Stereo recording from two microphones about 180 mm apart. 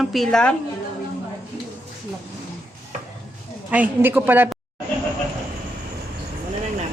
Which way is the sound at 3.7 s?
10° right (ahead or behind).